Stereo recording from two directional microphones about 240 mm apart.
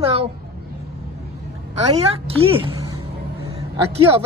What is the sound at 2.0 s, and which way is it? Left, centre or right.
Speech, right.